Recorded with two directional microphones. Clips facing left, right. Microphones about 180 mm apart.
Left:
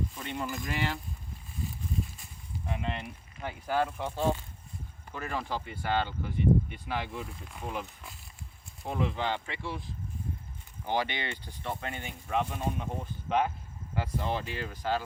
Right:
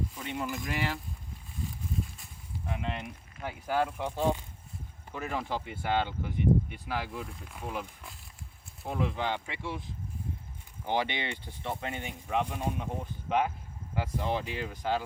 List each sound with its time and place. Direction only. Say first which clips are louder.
0.1 s speech: right 1 dB; 10° right (ahead or behind)
2.1 s speech: left 1 dB; centre (ahead or behind)
10.8 s speech: right 1 dB; 20° right (ahead or behind)